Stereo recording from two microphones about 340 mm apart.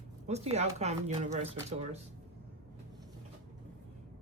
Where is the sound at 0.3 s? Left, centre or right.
Centre.